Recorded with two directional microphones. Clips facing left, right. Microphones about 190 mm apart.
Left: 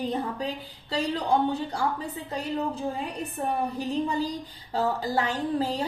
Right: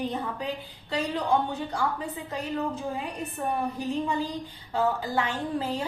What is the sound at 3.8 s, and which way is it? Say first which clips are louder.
A woman's voice: left 1 dB; 35° left (ahead or behind).